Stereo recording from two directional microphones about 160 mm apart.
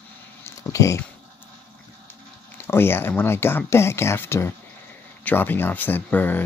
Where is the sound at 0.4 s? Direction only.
20° left (ahead or behind).